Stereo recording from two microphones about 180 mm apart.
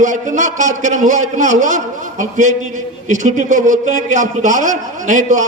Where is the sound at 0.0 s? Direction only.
45° right (ahead or behind).